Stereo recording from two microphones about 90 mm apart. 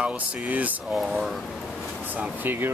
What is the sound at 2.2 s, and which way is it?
Speech, 20° right (ahead or behind).